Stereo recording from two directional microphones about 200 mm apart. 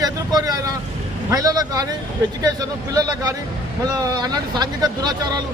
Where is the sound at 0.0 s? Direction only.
20° right (ahead or behind).